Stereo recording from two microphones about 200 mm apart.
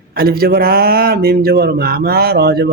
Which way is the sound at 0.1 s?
50° right (ahead or behind).